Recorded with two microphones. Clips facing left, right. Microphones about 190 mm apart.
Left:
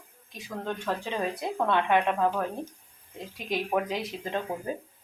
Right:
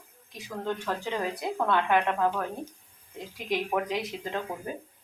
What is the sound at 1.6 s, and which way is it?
Speech, 25° left (ahead or behind).